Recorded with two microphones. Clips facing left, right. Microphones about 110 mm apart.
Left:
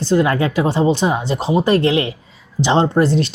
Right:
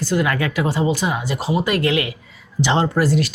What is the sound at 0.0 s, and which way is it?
Speech, 25° left (ahead or behind).